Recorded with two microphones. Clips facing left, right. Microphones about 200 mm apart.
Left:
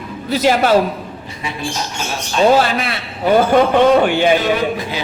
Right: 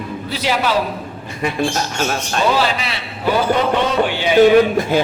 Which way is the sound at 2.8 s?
55° left (ahead or behind).